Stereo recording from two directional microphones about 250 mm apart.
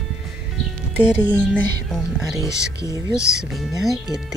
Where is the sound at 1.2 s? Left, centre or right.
Centre.